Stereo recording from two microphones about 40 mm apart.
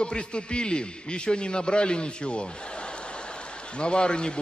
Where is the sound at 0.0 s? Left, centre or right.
Left.